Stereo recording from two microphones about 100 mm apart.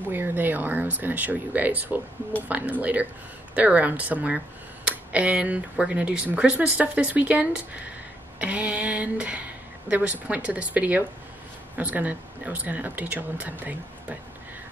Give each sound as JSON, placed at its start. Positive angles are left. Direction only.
{"t": 0.1, "sound": "speech", "side_deg": -20}